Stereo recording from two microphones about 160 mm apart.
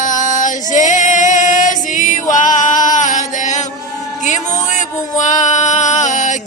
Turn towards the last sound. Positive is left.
turn(degrees=50)  # may be behind; listen again after turning